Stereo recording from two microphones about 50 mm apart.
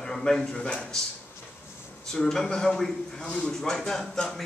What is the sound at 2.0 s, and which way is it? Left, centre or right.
A man's voice, centre.